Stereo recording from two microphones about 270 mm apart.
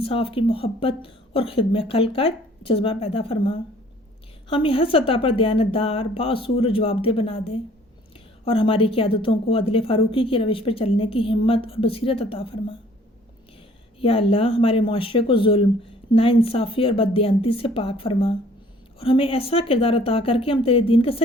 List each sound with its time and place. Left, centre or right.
0.0 s a woman's voice: centre
14.0 s a woman's voice: left